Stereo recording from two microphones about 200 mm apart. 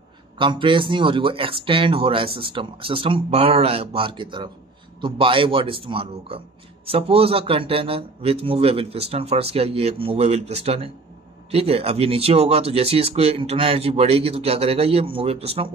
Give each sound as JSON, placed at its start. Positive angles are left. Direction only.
{"t": 0.4, "sound": "speech", "side_deg": -25}